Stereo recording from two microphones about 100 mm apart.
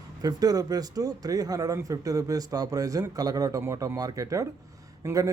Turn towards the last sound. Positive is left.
turn(degrees=-35)  # may be behind; listen again after turning